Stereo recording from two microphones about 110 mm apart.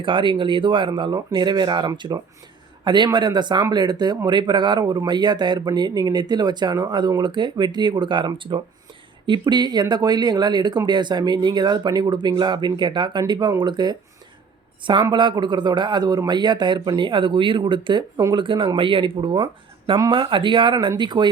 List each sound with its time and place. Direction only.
0.0 s speech: 50° right (ahead or behind)
15.1 s speech: 45° right (ahead or behind)